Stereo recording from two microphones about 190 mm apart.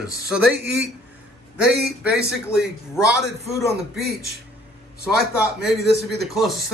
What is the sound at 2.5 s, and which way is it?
Speech, 5° right (ahead or behind).